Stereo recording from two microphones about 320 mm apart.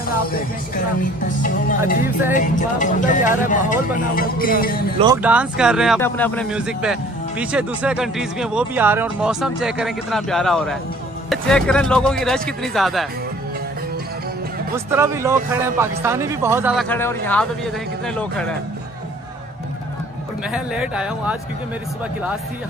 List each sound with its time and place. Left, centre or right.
1.2 s speech: left
4.9 s speech: centre
14.9 s a man's voice: centre
16.9 s speech: centre
20.5 s speech: centre